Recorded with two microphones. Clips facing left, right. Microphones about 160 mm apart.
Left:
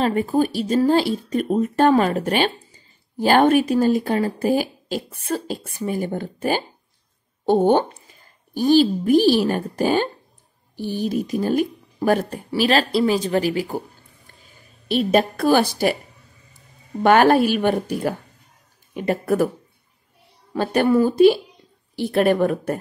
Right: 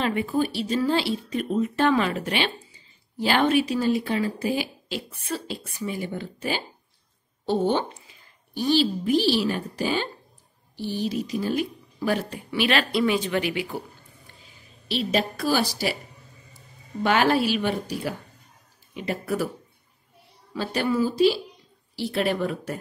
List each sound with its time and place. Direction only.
0.0 s a woman's voice: 40° left (ahead or behind)
14.4 s a woman's voice: 50° left (ahead or behind)
17.0 s speech: 50° left (ahead or behind)
20.5 s speech: 55° left (ahead or behind)